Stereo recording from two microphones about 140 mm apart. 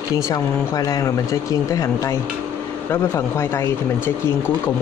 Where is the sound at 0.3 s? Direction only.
25° left (ahead or behind).